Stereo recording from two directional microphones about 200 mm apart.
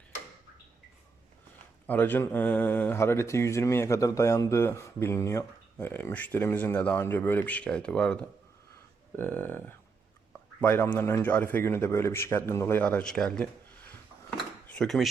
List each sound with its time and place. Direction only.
1.9 s speech: 10° left (ahead or behind)
14.8 s speech: centre (ahead or behind)